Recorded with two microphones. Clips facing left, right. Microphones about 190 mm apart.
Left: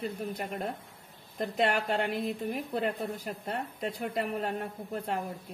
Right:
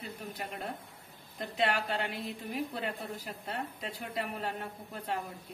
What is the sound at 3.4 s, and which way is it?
A woman's voice, 45° left (ahead or behind).